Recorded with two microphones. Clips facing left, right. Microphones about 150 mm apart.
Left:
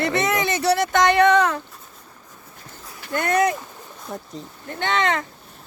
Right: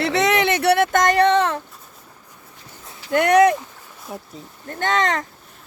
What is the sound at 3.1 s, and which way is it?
Speech, 80° right.